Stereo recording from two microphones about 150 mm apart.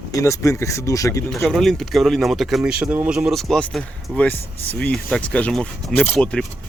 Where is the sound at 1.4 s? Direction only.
Centre (ahead or behind).